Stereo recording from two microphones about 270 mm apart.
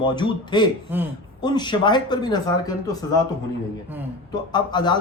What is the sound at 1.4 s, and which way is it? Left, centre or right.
Speech, centre.